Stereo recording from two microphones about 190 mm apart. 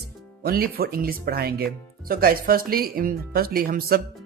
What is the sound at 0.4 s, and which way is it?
Speech, 50° right (ahead or behind).